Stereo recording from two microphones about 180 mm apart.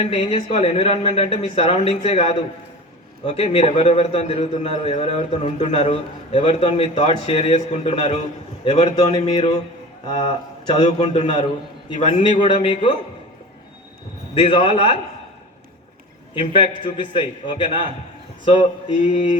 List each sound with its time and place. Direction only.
0.1 s a man's voice: 35° left (ahead or behind)
14.5 s a man's voice: 30° left (ahead or behind)
16.3 s a man's voice: 25° left (ahead or behind)
18.4 s a man's voice: 40° left (ahead or behind)